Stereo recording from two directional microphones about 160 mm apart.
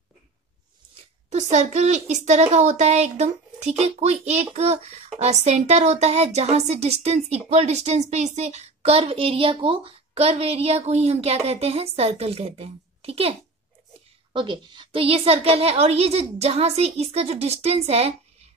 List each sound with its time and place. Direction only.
1.3 s a woman's voice: 45° right (ahead or behind)